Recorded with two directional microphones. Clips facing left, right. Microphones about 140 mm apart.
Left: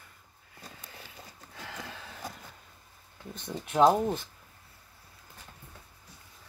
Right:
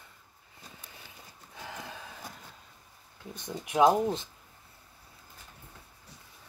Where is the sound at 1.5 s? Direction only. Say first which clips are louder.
Right 1 dB; 15° right (ahead or behind).